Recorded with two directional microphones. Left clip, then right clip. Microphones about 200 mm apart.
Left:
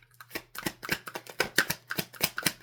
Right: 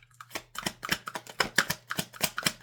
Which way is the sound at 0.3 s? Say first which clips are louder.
Right 1 dB; 20° left (ahead or behind).